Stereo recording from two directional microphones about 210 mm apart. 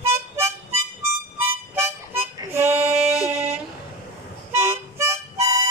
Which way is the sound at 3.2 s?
30° right (ahead or behind).